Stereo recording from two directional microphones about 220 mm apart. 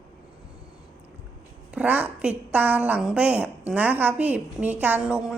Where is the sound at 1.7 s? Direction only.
5° right (ahead or behind).